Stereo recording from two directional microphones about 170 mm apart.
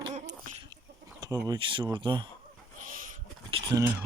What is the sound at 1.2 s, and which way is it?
Speech, 20° right (ahead or behind).